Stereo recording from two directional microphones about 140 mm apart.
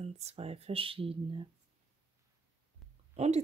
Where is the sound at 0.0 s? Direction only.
45° right (ahead or behind).